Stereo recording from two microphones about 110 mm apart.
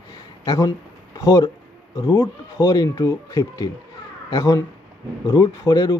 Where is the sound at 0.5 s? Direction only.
30° left (ahead or behind).